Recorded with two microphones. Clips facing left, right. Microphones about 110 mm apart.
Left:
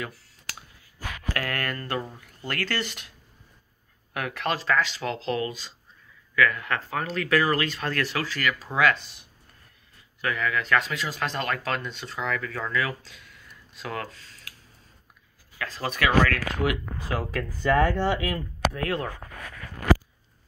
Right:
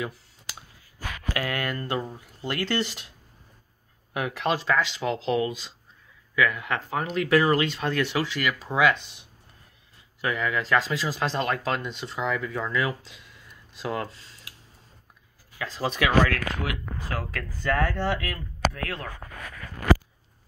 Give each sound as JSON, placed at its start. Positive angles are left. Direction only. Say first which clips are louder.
{"t": 1.3, "sound": "speech", "louder": "right 1 dB", "side_deg": -10}
{"t": 4.1, "sound": "speech", "louder": "right 2 dB", "side_deg": -20}
{"t": 15.6, "sound": "speech", "louder": "right 1 dB", "side_deg": -20}
{"t": 17.1, "sound": "speech", "louder": "left 4 dB", "side_deg": 20}